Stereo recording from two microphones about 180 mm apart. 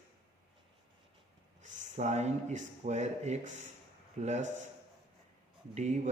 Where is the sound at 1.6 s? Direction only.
40° right (ahead or behind).